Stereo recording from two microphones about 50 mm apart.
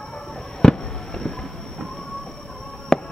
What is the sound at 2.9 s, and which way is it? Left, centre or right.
Music, centre.